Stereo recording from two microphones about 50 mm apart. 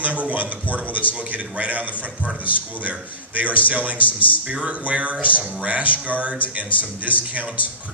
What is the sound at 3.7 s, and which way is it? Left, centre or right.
A man's voice, right.